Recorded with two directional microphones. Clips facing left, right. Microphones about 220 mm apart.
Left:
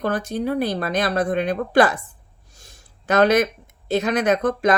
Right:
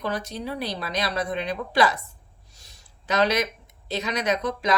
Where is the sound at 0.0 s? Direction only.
50° left (ahead or behind).